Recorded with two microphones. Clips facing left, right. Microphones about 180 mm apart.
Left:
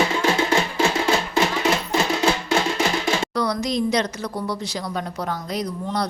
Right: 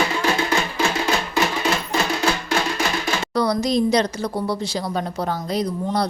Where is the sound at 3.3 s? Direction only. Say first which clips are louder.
Right 8 dB; 35° right (ahead or behind).